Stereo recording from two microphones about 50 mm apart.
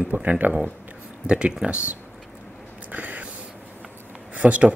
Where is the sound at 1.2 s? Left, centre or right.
Centre.